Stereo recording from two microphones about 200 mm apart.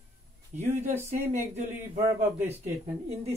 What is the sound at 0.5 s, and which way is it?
Speech, 35° right (ahead or behind).